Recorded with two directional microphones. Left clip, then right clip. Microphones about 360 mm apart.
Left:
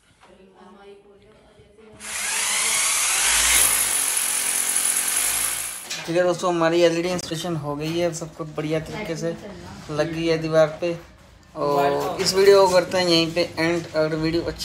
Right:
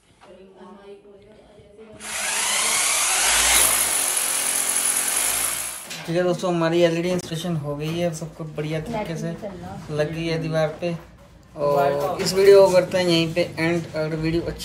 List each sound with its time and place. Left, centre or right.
2.0 s tools: centre
9.9 s speech: centre
12.4 s speech: centre